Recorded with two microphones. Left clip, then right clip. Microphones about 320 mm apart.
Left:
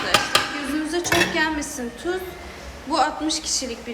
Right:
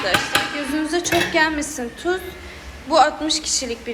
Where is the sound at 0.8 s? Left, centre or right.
Centre.